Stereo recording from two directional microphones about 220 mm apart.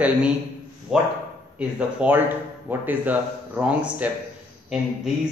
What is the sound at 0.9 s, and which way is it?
A man's voice, centre (ahead or behind).